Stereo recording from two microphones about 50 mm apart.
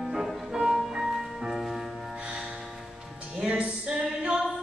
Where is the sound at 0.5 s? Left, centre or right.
Centre.